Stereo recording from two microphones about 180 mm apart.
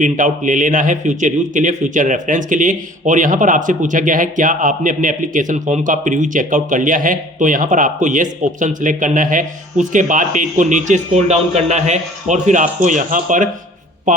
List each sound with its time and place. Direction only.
0.0 s a man's voice: 45° right (ahead or behind)